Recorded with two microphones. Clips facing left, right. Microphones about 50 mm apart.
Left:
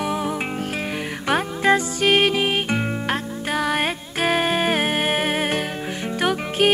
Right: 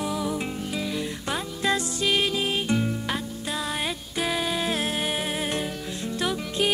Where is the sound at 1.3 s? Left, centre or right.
Left.